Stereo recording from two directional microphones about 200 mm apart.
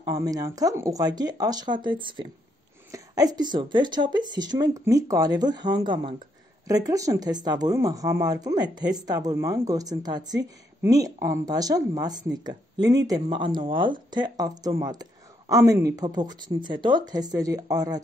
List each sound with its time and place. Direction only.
0.0 s speech: 15° right (ahead or behind)